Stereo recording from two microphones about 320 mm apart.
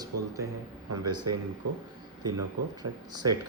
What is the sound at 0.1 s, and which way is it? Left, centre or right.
Speech, right.